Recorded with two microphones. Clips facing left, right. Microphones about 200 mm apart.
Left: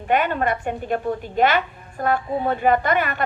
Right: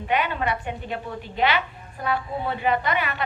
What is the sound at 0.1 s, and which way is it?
A woman's voice, 50° left (ahead or behind).